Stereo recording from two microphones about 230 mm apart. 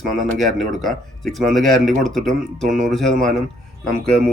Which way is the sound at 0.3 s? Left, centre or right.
Centre.